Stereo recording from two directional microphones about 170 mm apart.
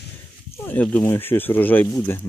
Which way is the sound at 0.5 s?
10° left (ahead or behind).